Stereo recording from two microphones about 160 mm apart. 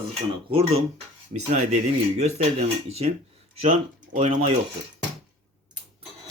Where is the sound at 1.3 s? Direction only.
45° right (ahead or behind).